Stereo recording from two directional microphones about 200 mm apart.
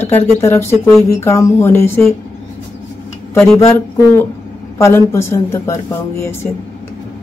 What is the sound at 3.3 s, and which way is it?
Speech, 5° left (ahead or behind).